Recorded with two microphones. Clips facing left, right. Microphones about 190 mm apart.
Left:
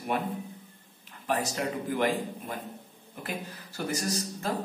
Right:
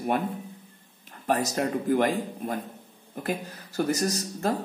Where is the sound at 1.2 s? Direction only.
45° right (ahead or behind).